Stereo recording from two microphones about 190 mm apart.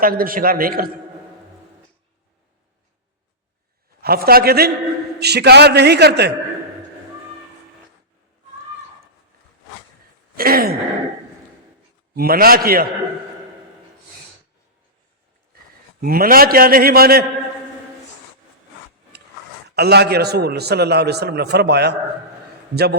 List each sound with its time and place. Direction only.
0.0 s a man's voice: 50° right (ahead or behind)
4.0 s a man's voice: 55° right (ahead or behind)
10.3 s a sound: 50° right (ahead or behind)
12.1 s a man's voice: 50° right (ahead or behind)
16.0 s a man's voice: 50° right (ahead or behind)
19.6 s a man's voice: 60° right (ahead or behind)